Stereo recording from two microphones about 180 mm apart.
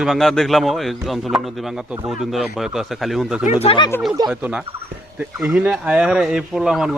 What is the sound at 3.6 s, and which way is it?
Speech, 25° left (ahead or behind).